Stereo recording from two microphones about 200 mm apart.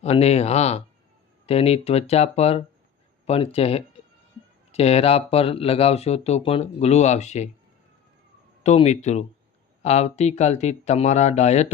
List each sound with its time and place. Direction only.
0.0 s speech: 30° left (ahead or behind)
8.6 s speech: 35° left (ahead or behind)